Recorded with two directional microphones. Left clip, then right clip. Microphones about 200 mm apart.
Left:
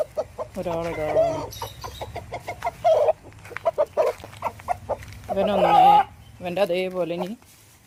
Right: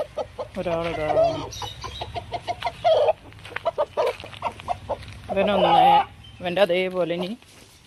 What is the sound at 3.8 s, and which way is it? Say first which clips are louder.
Chicken: left 2 dB; 35° left (ahead or behind).